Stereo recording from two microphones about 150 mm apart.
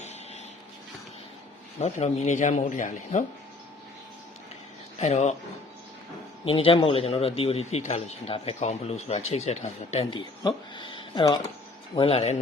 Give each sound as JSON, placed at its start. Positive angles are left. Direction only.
{"t": 1.8, "sound": "speech", "side_deg": 50}
{"t": 4.9, "sound": "speech", "side_deg": 45}
{"t": 6.4, "sound": "a man's voice", "side_deg": 40}